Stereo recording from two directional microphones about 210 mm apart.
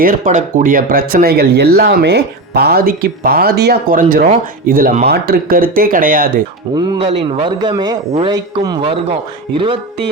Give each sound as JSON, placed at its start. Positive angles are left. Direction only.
{"t": 0.0, "sound": "speech", "side_deg": -40}
{"t": 6.7, "sound": "a man's voice", "side_deg": -20}